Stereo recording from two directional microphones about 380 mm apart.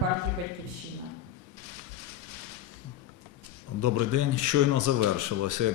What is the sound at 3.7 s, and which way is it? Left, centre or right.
Speech, right.